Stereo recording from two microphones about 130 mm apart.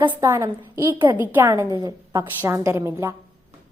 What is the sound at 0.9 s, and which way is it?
Speech, 15° right (ahead or behind).